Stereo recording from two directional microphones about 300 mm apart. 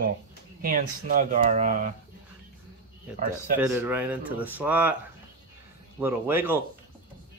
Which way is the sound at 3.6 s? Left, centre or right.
Centre.